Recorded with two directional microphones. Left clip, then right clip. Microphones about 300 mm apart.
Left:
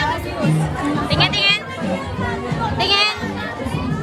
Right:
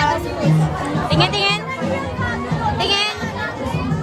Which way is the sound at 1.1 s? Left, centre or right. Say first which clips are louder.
Left 1 dB; centre.